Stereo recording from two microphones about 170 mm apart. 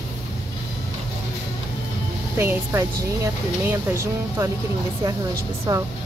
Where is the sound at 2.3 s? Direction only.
15° right (ahead or behind).